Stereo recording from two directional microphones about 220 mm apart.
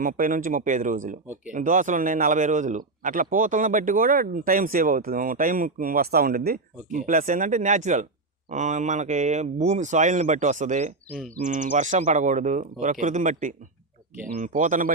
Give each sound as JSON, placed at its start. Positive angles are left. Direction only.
{"t": 0.0, "sound": "speech", "side_deg": -40}